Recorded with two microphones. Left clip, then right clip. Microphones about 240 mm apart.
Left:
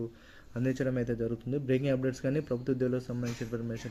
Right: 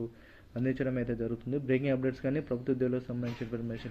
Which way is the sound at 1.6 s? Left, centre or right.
Left.